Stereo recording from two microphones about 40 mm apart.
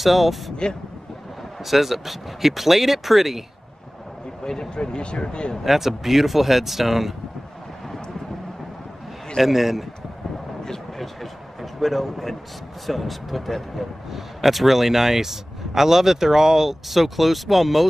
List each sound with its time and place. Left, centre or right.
0.0 s speech: centre
0.6 s speech: left
1.6 s speech: centre
4.5 s speech: centre
5.6 s speech: centre
9.4 s a man's voice: centre
10.6 s a sound: centre
11.6 s a man's voice: centre